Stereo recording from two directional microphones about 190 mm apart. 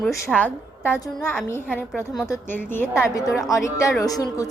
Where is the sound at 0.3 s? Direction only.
10° left (ahead or behind).